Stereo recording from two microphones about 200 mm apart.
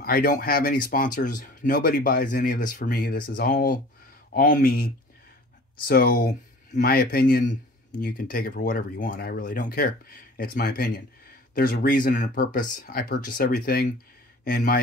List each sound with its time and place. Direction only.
0.0 s speech: 45° left (ahead or behind)